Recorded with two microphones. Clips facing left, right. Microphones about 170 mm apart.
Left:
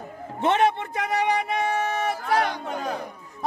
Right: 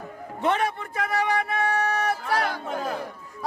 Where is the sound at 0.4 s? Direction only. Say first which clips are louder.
Left 4 dB; 25° left (ahead or behind).